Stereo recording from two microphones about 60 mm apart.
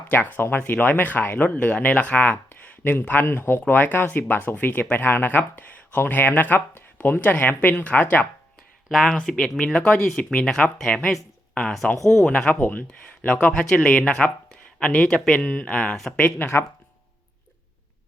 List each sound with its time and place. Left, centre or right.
0.1 s speech: left
8.9 s speech: centre
12.5 s speech: left
13.5 s speech: centre
15.4 s speech: centre